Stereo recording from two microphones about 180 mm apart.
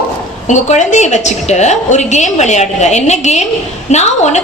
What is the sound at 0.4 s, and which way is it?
A woman's voice, 40° left (ahead or behind).